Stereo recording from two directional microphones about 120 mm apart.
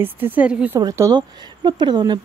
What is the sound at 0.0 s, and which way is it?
Speech, 15° right (ahead or behind).